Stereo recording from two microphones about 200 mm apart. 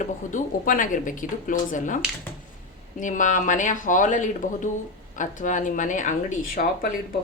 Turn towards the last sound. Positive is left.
turn(degrees=45)  # may be behind; listen again after turning